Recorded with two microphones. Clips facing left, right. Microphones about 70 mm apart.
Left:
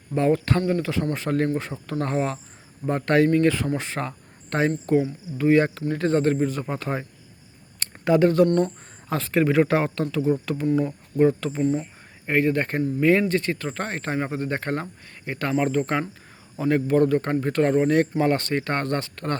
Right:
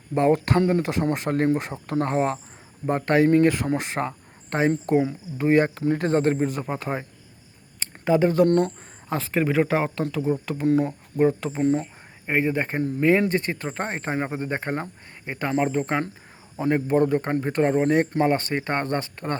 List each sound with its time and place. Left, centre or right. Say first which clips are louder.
0.1 s speech: right 1 dB; right
2.8 s speech: even; centre
5.4 s speech: left 1 dB; right
5.6 s speech: right 1 dB; right
7.8 s a sound: left 1 dB; centre
9.1 s speech: left 2 dB; centre
13.2 s speech: left 1 dB; right